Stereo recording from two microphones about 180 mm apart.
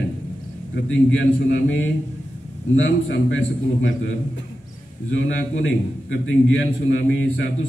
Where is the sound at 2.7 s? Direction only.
90° left.